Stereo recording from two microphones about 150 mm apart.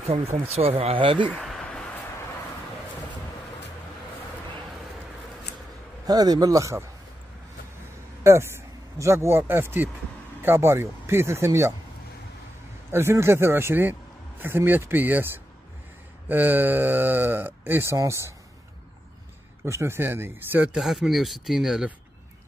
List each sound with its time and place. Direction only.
0.0 s speech: 45° right (ahead or behind)
1.3 s a sound: 5° left (ahead or behind)
6.0 s a man's voice: 25° right (ahead or behind)
8.2 s speech: 15° right (ahead or behind)
12.9 s speech: 15° right (ahead or behind)
19.6 s speech: 15° right (ahead or behind)